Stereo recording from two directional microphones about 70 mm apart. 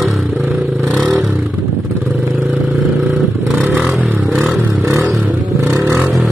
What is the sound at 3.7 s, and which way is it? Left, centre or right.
Scrape, centre.